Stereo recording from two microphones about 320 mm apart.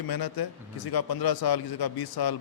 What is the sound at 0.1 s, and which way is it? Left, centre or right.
A man's voice, left.